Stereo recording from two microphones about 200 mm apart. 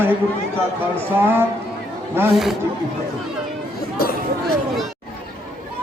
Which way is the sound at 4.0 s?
50° left (ahead or behind).